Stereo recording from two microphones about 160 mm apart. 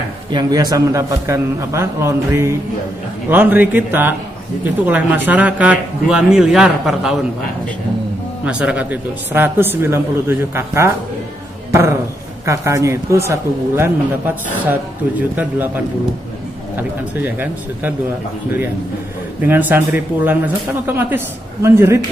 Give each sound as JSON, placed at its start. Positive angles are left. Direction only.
{"t": 0.3, "sound": "a man's voice", "side_deg": -25}
{"t": 8.5, "sound": "a man's voice", "side_deg": -5}
{"t": 17.2, "sound": "a man's voice", "side_deg": -15}
{"t": 19.4, "sound": "a man's voice", "side_deg": -10}